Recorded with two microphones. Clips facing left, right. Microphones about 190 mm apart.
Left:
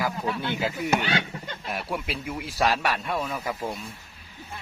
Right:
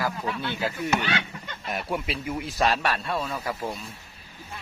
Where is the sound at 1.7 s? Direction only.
Centre (ahead or behind).